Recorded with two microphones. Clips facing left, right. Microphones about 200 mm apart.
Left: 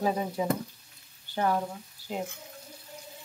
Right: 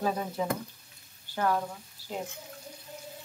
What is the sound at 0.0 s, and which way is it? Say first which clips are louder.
Speech: left 2 dB; 15° left (ahead or behind).